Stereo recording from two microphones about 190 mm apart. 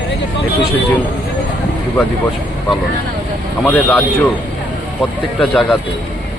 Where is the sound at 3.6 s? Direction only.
10° left (ahead or behind).